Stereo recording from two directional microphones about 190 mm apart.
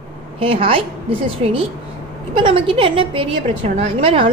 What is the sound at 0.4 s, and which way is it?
A woman's voice, 30° right (ahead or behind).